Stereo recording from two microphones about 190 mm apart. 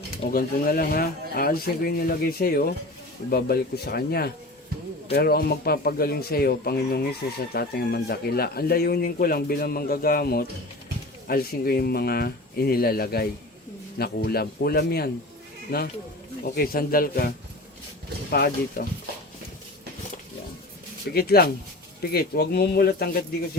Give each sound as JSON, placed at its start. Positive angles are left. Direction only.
{"t": 0.3, "sound": "a man's voice", "side_deg": 50}
{"t": 21.1, "sound": "speech", "side_deg": 55}